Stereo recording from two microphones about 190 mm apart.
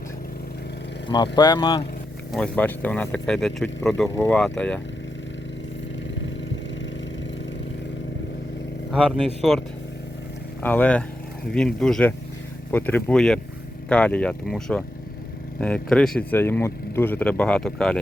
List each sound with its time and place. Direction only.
1.0 s speech: 25° left (ahead or behind)
2.3 s speech: 5° left (ahead or behind)
8.9 s speech: centre (ahead or behind)